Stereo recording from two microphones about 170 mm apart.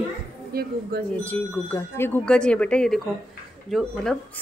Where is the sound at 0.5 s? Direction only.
65° right (ahead or behind).